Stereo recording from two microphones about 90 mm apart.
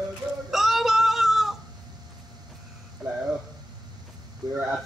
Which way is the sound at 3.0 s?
10° right (ahead or behind).